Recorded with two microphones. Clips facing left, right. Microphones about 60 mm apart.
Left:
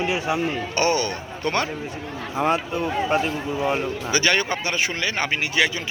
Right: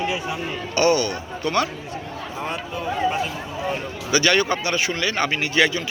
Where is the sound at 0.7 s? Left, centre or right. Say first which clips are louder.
Right 4 dB; left.